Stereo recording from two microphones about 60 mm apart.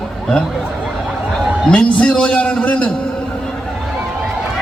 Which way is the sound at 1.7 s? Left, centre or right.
Centre.